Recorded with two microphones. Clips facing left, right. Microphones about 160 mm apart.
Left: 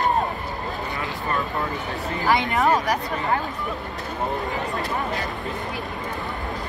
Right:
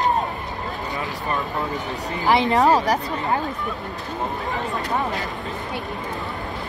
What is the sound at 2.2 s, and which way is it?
Speech, 30° right (ahead or behind).